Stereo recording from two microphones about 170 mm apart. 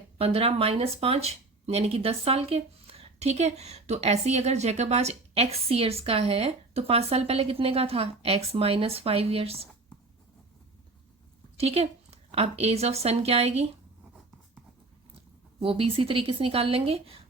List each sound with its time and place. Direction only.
0.2 s speech: 35° right (ahead or behind)
11.5 s a woman's voice: 35° right (ahead or behind)
15.6 s speech: 30° right (ahead or behind)